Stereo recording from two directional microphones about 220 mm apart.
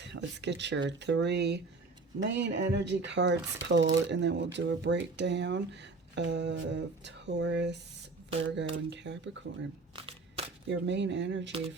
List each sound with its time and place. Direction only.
0.0 s speech: 50° right (ahead or behind)
9.9 s a sound: 25° right (ahead or behind)
10.7 s speech: 55° right (ahead or behind)